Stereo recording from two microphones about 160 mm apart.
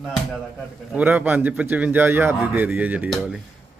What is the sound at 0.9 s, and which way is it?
A man's voice, 10° right (ahead or behind).